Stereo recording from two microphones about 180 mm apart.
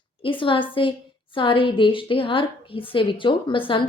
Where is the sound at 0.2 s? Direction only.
30° left (ahead or behind).